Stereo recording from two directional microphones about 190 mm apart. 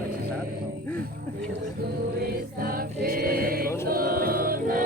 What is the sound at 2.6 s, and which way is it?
Choir, 50° right (ahead or behind).